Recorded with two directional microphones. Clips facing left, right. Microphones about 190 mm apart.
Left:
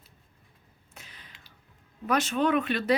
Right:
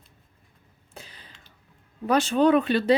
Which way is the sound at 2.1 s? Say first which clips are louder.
Right 6 dB; 30° right (ahead or behind).